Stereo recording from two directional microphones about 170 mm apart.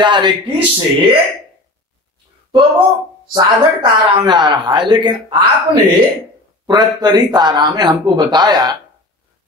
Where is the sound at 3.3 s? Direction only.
25° right (ahead or behind).